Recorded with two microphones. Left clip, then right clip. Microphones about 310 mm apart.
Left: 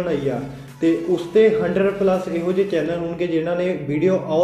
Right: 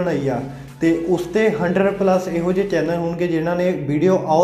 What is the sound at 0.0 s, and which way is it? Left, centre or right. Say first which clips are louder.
Speech: right 1 dB; right.